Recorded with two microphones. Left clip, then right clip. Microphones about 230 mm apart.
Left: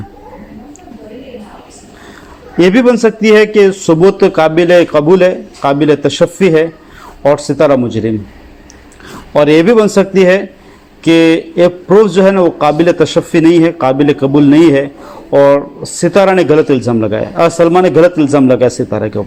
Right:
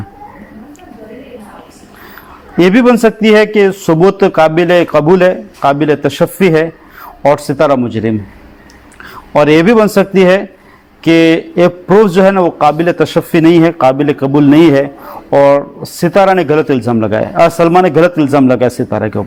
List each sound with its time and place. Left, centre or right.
2.6 s a man's voice: right
9.3 s a man's voice: right
15.3 s a man's voice: right